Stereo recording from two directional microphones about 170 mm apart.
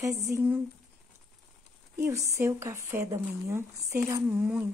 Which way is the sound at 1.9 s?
15° right (ahead or behind).